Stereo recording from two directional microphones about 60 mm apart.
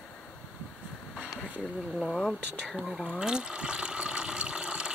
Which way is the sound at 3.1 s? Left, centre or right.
Centre.